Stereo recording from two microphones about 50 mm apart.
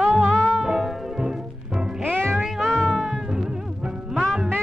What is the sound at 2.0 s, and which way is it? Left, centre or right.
Music, right.